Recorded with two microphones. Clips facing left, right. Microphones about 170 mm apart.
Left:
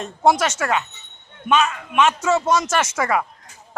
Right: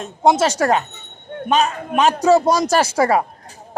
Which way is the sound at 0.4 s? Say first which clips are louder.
Right 5 dB; 35° right (ahead or behind).